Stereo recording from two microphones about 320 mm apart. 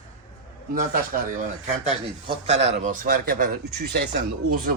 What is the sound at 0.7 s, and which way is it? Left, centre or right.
Speech, right.